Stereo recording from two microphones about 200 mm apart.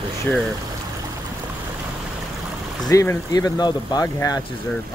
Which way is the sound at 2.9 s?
15° left (ahead or behind).